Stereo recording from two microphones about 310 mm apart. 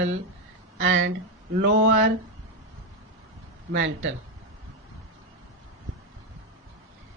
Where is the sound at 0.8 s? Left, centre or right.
Right.